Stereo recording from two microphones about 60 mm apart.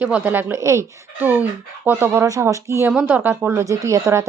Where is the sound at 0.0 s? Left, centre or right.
Right.